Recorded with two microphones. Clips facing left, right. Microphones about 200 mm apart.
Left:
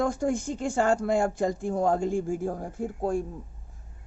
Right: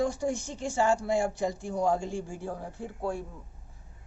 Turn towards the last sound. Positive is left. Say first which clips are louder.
# left 6 dB
turn(degrees=50)  # may be behind; listen again after turning